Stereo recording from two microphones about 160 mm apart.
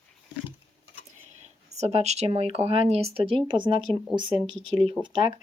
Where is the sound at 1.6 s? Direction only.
45° right (ahead or behind).